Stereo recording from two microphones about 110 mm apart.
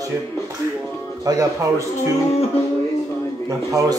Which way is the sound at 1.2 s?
35° right (ahead or behind).